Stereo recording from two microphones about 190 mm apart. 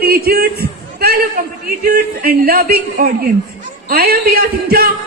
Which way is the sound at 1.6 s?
50° right (ahead or behind).